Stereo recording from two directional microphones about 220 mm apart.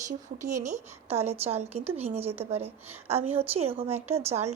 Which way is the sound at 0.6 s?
30° right (ahead or behind).